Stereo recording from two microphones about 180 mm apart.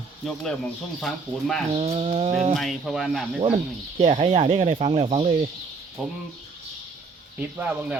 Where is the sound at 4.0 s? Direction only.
35° right (ahead or behind).